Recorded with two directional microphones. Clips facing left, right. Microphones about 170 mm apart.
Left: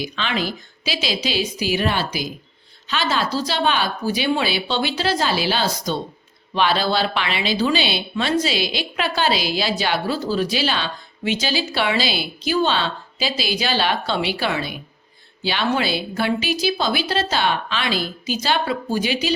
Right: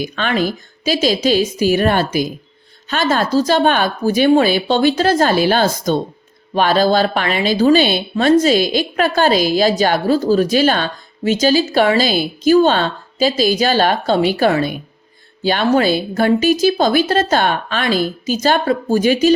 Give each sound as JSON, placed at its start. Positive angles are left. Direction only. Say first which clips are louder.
{"t": 0.0, "sound": "a woman's voice", "louder": "right 6 dB", "side_deg": -50}